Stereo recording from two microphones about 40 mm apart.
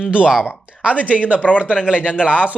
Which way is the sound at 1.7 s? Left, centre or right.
Right.